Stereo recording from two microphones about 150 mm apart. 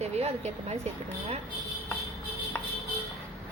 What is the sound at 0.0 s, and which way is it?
Speech, 45° right (ahead or behind).